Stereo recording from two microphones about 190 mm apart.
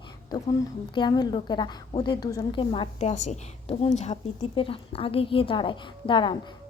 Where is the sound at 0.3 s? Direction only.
20° left (ahead or behind).